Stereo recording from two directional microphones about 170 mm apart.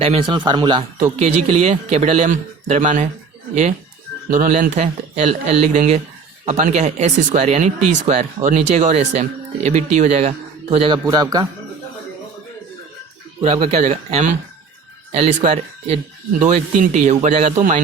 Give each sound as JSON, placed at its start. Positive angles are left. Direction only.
{"t": 0.0, "sound": "a man's voice", "side_deg": -30}
{"t": 1.1, "sound": "a man's voice", "side_deg": -40}
{"t": 4.3, "sound": "a man's voice", "side_deg": -45}
{"t": 13.4, "sound": "a man's voice", "side_deg": -40}